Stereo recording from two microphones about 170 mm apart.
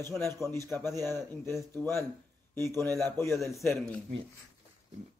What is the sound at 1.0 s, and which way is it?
Speech, 15° left (ahead or behind).